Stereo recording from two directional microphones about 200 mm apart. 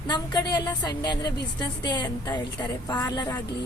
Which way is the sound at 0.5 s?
20° left (ahead or behind).